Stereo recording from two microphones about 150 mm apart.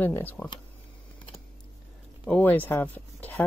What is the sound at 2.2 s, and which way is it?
Speech, 10° left (ahead or behind).